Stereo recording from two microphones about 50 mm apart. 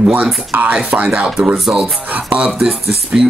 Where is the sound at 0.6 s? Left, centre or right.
Right.